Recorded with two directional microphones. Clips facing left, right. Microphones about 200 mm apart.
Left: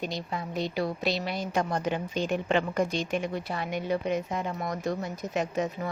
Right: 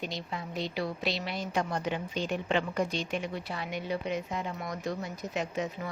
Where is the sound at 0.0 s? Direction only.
45° left (ahead or behind).